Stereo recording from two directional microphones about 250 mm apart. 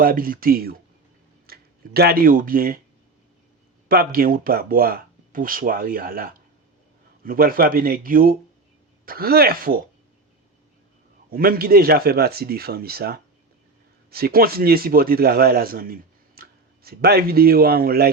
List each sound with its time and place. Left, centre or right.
0.0 s speech: right
3.8 s speech: right
11.3 s a man's voice: right